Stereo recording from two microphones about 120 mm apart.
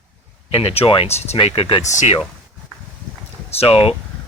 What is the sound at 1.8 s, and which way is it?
Speech, 75° left (ahead or behind).